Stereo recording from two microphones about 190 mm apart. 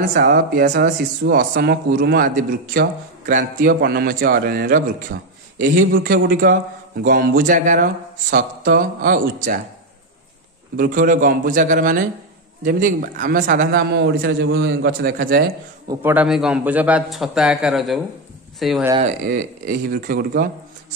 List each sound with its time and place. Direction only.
0.1 s speech: 50° right (ahead or behind)
10.8 s speech: 45° right (ahead or behind)
15.9 s a man's voice: 10° right (ahead or behind)
18.9 s speech: 40° right (ahead or behind)